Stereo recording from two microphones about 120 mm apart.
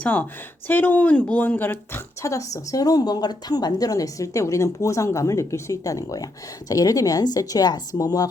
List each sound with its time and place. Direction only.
0.0 s a woman's voice: 15° left (ahead or behind); by 8.3 s 30° left (ahead or behind)